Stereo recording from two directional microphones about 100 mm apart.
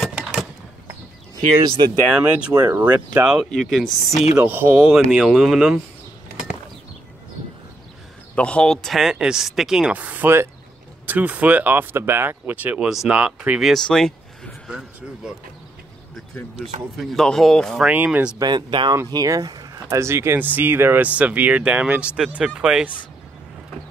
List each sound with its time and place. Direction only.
0.0 s a sound: centre (ahead or behind)
1.8 s speech: 50° right (ahead or behind)
2.8 s speech: 10° right (ahead or behind)
3.4 s speech: centre (ahead or behind)
4.4 s speech: 15° right (ahead or behind)
4.9 s speech: 5° right (ahead or behind)
8.4 s speech: 10° left (ahead or behind)
14.7 s speech: 5° right (ahead or behind)
16.5 s speech: centre (ahead or behind)
17.8 s speech: 15° right (ahead or behind)
18.4 s speech: 50° right (ahead or behind)
19.1 s speech: 40° right (ahead or behind); by 22.8 s 5° right (ahead or behind)